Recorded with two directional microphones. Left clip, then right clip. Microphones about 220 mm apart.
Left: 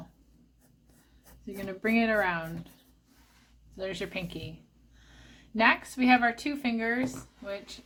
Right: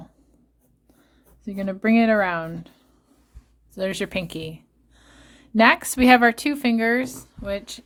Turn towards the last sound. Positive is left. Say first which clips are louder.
# right 9 dB
turn(degrees=-50)  # may be behind; listen again after turning